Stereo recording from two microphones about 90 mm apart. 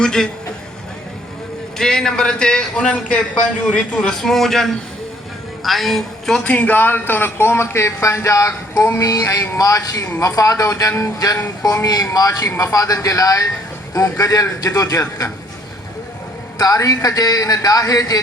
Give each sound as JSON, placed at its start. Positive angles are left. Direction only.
{"t": 0.0, "sound": "a man's voice", "side_deg": 5}
{"t": 1.8, "sound": "a man's voice", "side_deg": 5}
{"t": 6.4, "sound": "speech", "side_deg": 15}
{"t": 16.6, "sound": "speech", "side_deg": 40}